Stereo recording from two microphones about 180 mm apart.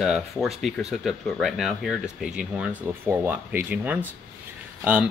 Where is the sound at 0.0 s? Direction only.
Centre (ahead or behind).